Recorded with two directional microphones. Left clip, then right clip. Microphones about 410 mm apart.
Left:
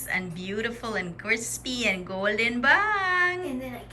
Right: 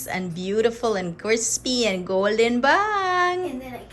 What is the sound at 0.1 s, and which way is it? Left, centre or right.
A woman's voice, centre.